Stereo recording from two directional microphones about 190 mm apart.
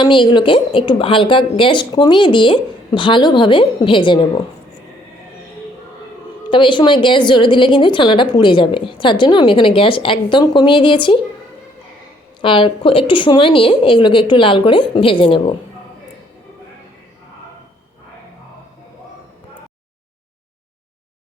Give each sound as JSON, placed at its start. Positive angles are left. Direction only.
{"t": 0.0, "sound": "a woman's voice", "side_deg": 25}
{"t": 6.5, "sound": "a woman's voice", "side_deg": 25}
{"t": 12.4, "sound": "a woman's voice", "side_deg": 25}